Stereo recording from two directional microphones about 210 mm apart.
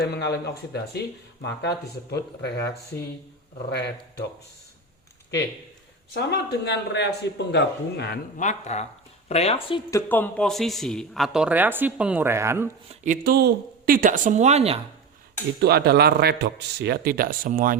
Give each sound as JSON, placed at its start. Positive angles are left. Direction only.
{"t": 0.0, "sound": "a man's voice", "side_deg": 50}
{"t": 6.1, "sound": "a man's voice", "side_deg": 50}
{"t": 8.4, "sound": "speech", "side_deg": 35}
{"t": 10.1, "sound": "speech", "side_deg": 5}
{"t": 12.9, "sound": "speech", "side_deg": -40}
{"t": 15.6, "sound": "speech", "side_deg": -50}